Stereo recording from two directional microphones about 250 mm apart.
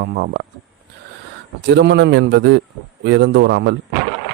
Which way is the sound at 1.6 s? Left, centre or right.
Right.